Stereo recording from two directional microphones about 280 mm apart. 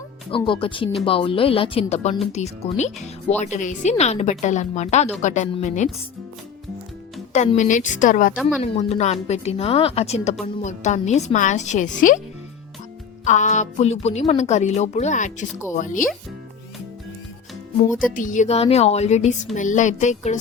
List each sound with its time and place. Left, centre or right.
0.3 s speech: centre
7.3 s speech: left
13.2 s speech: left
18.1 s speech: left